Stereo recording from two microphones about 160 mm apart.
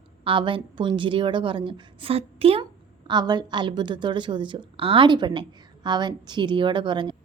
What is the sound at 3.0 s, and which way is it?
A woman's voice, 25° right (ahead or behind).